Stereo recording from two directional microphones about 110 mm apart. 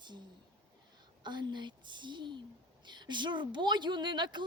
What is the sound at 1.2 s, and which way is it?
Speech, 45° right (ahead or behind).